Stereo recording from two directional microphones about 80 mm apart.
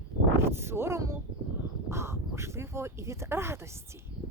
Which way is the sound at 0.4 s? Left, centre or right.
Right.